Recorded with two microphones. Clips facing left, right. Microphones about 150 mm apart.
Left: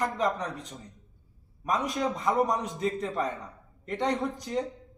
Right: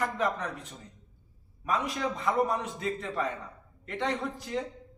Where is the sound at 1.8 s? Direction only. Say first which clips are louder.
Left 2 dB; 40° left (ahead or behind).